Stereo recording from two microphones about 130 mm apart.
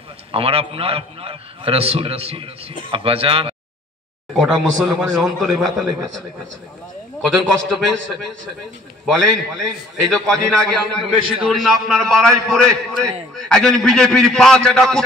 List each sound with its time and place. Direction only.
0.3 s a man's voice: 45° right (ahead or behind)
4.3 s a man's voice: centre (ahead or behind)
7.2 s a man's voice: centre (ahead or behind)